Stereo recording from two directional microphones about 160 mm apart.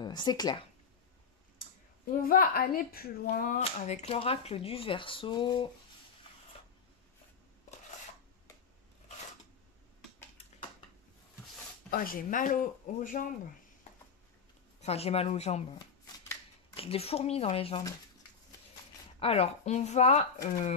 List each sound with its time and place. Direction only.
0.0 s speech: 25° left (ahead or behind)
2.2 s speech: 65° left (ahead or behind); by 5.7 s 30° left (ahead or behind)
11.9 s speech: 65° left (ahead or behind)
14.8 s speech: 40° left (ahead or behind)
16.7 s speech: 35° left (ahead or behind)
19.1 s speech: 40° left (ahead or behind)